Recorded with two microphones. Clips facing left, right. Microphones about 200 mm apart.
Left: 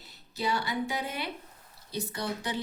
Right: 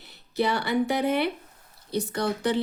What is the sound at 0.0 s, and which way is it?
Speech, 65° right (ahead or behind).